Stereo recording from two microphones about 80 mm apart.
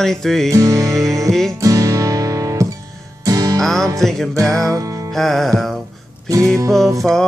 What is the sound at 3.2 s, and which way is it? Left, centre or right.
Music, right.